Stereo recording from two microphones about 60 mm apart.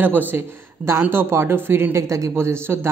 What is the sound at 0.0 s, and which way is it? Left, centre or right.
Speech, right.